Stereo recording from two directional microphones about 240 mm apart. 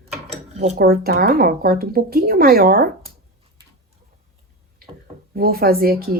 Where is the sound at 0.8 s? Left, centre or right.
Right.